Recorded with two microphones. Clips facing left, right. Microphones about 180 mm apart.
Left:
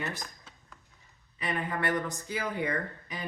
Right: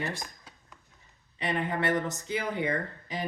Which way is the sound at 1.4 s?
25° right (ahead or behind).